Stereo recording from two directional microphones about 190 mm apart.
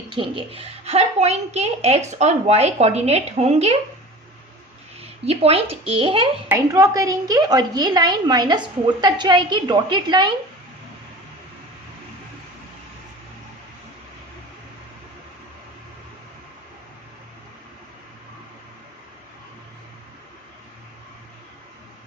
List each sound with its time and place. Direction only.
0.1 s a woman's voice: 25° right (ahead or behind)
4.9 s a woman's voice: 30° right (ahead or behind)
6.5 s a woman's voice: 15° right (ahead or behind)